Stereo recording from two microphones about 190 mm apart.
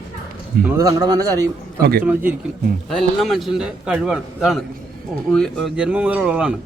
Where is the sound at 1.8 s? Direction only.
55° right (ahead or behind).